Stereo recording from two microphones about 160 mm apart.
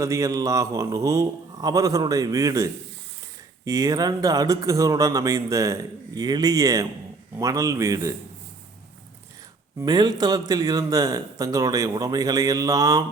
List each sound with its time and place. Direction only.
0.0 s a man's voice: 20° right (ahead or behind)
9.7 s a man's voice: 25° right (ahead or behind)